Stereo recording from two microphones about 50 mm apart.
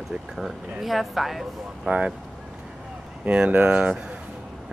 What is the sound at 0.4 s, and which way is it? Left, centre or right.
Speech, centre.